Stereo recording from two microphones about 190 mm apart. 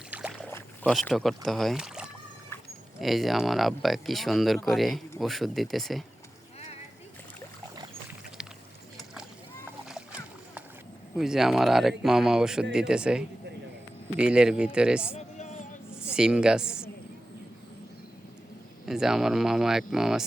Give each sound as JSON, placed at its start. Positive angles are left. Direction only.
{"t": 0.1, "sound": "rowboat", "side_deg": -10}
{"t": 0.3, "sound": "boat", "side_deg": 5}
{"t": 3.0, "sound": "speech", "side_deg": 0}
{"t": 9.6, "sound": "splash", "side_deg": -5}
{"t": 11.2, "sound": "speech", "side_deg": 0}
{"t": 15.1, "sound": "music", "side_deg": 40}
{"t": 16.0, "sound": "a woman's voice", "side_deg": -5}
{"t": 18.9, "sound": "speech", "side_deg": 0}